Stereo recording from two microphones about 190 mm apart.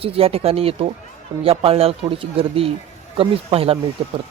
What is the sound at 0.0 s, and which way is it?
A man's voice, 30° right (ahead or behind).